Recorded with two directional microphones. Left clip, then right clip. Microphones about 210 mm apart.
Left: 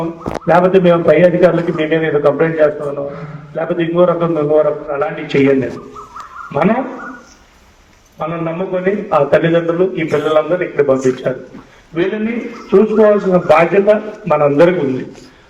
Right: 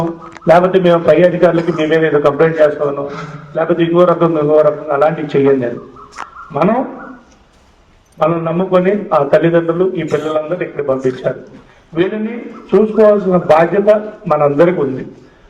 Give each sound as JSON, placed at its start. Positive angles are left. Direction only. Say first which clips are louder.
{"t": 0.5, "sound": "a man's voice", "louder": "right 1 dB", "side_deg": -40}
{"t": 8.2, "sound": "a man's voice", "louder": "right 5 dB", "side_deg": -45}